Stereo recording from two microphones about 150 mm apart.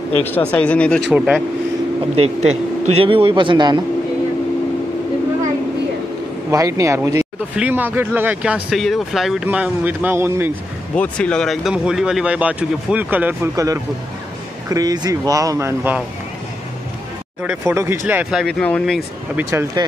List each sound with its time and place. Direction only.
0.2 s speech: 10° left (ahead or behind)
1.1 s speech: 5° right (ahead or behind)
2.1 s a man's voice: 45° right (ahead or behind); by 3.8 s 30° right (ahead or behind)
6.5 s speech: 20° right (ahead or behind)
11.0 s speech: 5° left (ahead or behind); by 16.0 s 15° right (ahead or behind)
17.4 s speech: 10° right (ahead or behind)
18.3 s speech: 5° left (ahead or behind)
19.3 s speech: 15° right (ahead or behind)